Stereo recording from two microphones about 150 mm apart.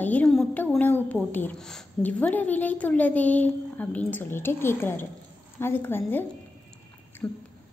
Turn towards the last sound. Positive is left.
turn(degrees=20)  # may be behind; listen again after turning